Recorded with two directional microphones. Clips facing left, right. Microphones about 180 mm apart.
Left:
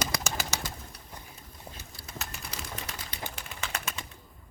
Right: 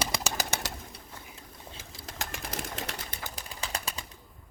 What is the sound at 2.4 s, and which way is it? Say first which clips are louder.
Pigeon: right 5 dB; 50° right (ahead or behind).